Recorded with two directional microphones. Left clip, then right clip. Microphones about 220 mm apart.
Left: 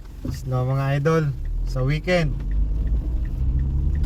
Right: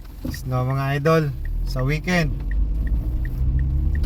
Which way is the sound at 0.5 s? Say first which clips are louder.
Right 1 dB; 35° right (ahead or behind).